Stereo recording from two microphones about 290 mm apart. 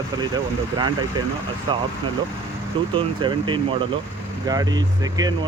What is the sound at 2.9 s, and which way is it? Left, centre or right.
Speech, centre.